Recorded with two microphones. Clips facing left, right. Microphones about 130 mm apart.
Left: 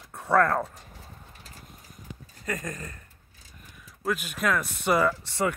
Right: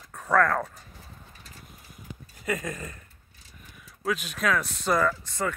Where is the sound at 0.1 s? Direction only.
30° left (ahead or behind).